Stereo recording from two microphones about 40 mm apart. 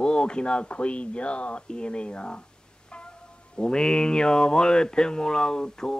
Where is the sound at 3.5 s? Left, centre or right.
Left.